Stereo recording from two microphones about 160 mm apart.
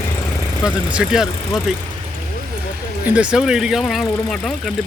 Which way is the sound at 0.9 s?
5° right (ahead or behind).